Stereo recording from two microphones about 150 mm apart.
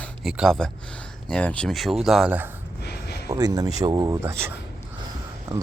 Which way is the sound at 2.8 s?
90° left.